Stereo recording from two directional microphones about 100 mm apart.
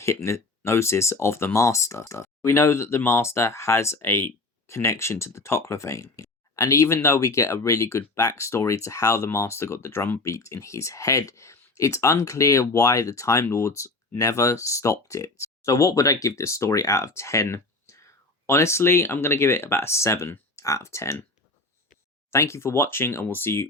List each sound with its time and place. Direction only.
0.0 s speech: 30° left (ahead or behind)
22.3 s speech: 25° left (ahead or behind)